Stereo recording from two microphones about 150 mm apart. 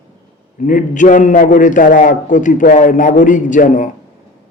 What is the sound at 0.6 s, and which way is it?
A man's voice, 60° left (ahead or behind).